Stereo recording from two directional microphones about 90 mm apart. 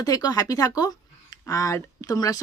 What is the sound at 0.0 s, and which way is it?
Speech, 45° left (ahead or behind).